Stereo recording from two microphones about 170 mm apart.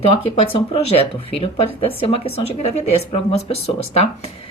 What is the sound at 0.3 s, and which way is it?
Speech, 35° left (ahead or behind).